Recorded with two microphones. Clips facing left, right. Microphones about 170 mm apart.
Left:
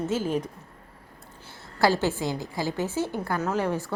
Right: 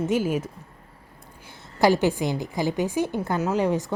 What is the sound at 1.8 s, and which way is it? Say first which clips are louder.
A woman's voice: right 3 dB; 15° right (ahead or behind).